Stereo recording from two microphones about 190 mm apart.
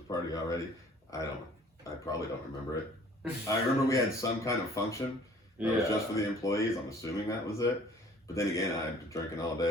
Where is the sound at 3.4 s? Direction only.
15° left (ahead or behind).